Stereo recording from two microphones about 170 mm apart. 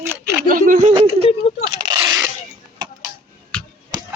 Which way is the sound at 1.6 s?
25° right (ahead or behind).